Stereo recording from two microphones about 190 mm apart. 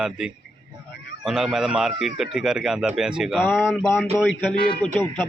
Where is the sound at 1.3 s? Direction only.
5° right (ahead or behind).